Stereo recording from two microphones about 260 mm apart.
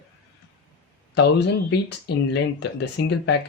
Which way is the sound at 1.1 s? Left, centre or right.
Left.